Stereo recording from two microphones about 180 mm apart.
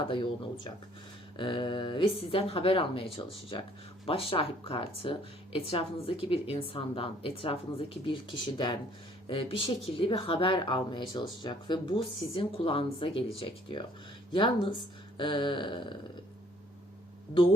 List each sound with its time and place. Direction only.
0.1 s a woman's voice: 30° left (ahead or behind)